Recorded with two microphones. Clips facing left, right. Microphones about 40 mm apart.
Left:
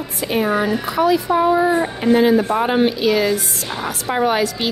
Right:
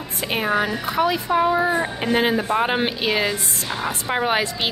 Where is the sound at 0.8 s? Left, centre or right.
Right.